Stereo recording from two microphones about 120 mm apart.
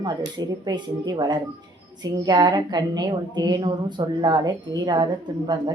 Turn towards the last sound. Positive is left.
turn(degrees=-35)  # may be behind; listen again after turning